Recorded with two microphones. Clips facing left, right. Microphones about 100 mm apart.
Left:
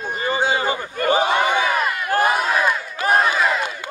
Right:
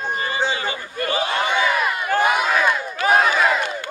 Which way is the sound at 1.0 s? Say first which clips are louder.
Left 5 dB; 20° left (ahead or behind).